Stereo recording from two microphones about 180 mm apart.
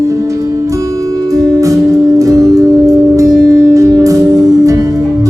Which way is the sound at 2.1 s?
20° right (ahead or behind).